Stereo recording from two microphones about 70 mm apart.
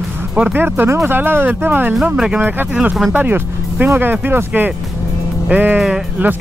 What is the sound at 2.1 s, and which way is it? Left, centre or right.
Speech, centre.